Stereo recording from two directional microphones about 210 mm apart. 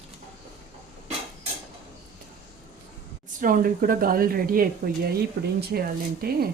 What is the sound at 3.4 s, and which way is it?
Speech, 40° right (ahead or behind).